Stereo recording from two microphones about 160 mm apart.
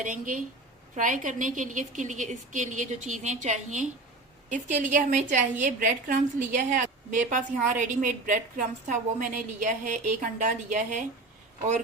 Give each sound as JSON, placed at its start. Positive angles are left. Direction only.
{"t": 0.0, "sound": "a woman's voice", "side_deg": -55}